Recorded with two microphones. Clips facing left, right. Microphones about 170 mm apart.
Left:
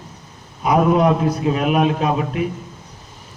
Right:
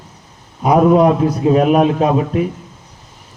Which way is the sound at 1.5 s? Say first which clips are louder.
Right 8 dB; 40° right (ahead or behind).